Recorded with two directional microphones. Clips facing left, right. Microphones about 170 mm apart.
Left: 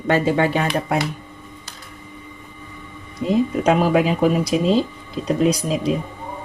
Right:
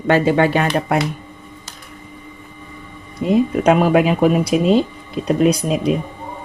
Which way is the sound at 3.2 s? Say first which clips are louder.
Right 3 dB; 60° right (ahead or behind).